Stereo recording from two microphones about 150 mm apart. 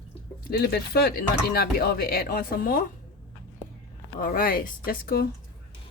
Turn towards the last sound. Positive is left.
turn(degrees=85)